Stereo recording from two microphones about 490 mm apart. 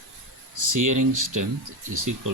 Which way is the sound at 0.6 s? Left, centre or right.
Right.